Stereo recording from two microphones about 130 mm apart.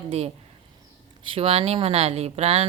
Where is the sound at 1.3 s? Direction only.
45° right (ahead or behind).